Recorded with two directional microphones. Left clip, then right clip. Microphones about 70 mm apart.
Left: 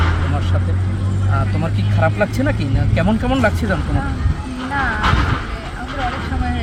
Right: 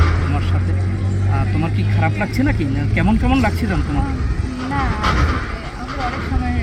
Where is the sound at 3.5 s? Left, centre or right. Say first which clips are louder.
Left 2 dB; left.